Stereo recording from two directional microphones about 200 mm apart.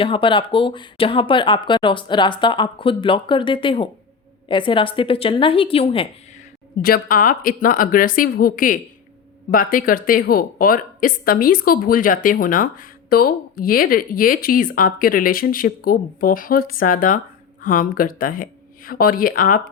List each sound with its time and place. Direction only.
0.0 s speech: 25° left (ahead or behind)
6.8 s speech: 45° left (ahead or behind)